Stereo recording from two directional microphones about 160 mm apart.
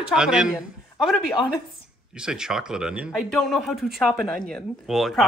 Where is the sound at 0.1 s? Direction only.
5° right (ahead or behind).